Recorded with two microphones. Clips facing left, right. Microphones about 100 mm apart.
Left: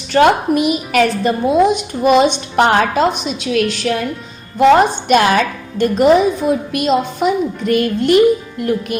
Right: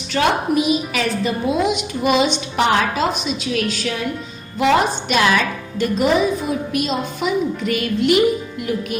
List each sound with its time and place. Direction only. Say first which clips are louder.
0.1 s a woman's voice: left 6 dB; 55° left (ahead or behind)